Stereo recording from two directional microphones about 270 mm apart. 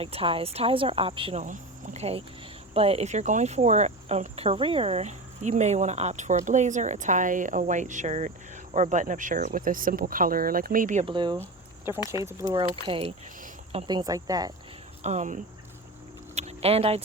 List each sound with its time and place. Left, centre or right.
0.0 s cricket: right
12.2 s speech: centre
12.9 s speech: right
15.0 s cricket: right
16.3 s vehicle: right